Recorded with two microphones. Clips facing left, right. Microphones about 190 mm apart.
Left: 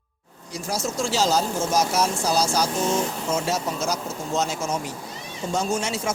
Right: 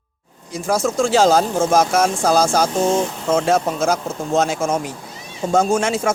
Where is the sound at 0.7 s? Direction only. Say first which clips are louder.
Right 9 dB; 50° right (ahead or behind).